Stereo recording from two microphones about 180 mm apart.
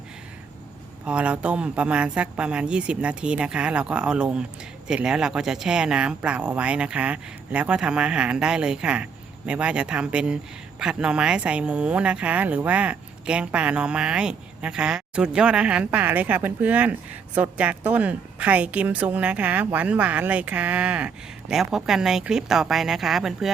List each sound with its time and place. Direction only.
1.0 s speech: 5° right (ahead or behind)